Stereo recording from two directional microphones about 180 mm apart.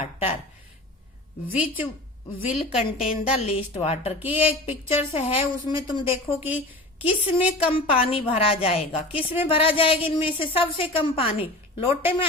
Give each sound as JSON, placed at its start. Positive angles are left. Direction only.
{"t": 0.0, "sound": "speech", "side_deg": 35}
{"t": 1.5, "sound": "a woman's voice", "side_deg": -10}
{"t": 2.5, "sound": "a woman's voice", "side_deg": 35}